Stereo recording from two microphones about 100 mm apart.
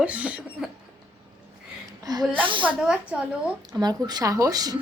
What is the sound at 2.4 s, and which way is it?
Speech, 55° right (ahead or behind).